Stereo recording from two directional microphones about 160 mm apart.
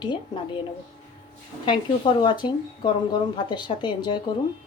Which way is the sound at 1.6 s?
30° left (ahead or behind).